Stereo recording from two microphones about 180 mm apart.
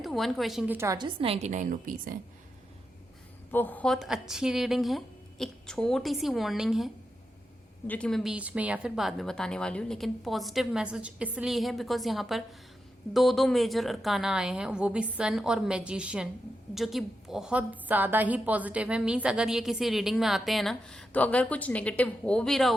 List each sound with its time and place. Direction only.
0.0 s a woman's voice: centre (ahead or behind); by 2.1 s 50° right (ahead or behind)
3.5 s a woman's voice: 10° left (ahead or behind)